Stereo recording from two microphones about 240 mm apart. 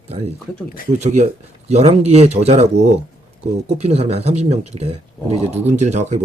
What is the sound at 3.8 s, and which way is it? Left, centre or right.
Speech, right.